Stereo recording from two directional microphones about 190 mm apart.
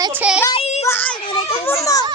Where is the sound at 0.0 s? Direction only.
10° right (ahead or behind).